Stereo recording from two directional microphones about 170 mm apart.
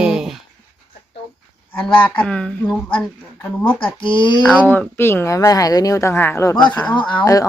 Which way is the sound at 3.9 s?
30° left (ahead or behind).